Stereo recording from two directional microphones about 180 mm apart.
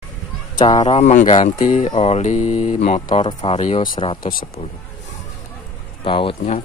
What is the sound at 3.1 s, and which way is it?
Speech, 25° left (ahead or behind).